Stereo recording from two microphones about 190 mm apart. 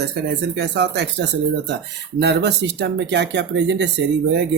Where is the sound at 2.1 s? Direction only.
60° right (ahead or behind).